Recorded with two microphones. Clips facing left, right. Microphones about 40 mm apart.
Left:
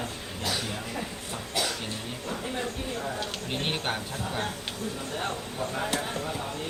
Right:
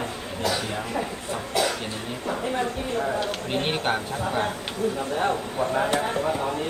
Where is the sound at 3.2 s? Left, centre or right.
Centre.